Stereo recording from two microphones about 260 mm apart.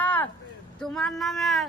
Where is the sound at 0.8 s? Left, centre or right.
Centre.